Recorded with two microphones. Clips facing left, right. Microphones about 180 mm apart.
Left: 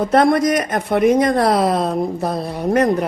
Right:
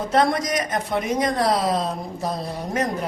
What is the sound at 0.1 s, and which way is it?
A woman's voice, 55° left (ahead or behind).